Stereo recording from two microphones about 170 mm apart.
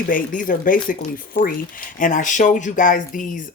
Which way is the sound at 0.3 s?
50° left (ahead or behind).